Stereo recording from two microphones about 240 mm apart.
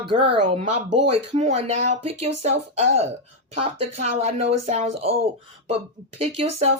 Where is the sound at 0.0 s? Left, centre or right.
Right.